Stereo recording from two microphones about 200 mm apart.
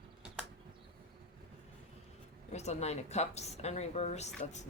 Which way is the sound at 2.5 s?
35° left (ahead or behind).